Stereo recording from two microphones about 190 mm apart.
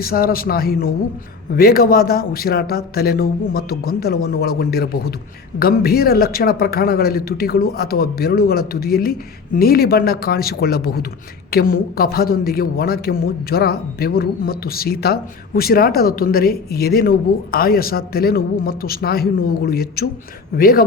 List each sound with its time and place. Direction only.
0.0 s a man's voice: 50° left (ahead or behind)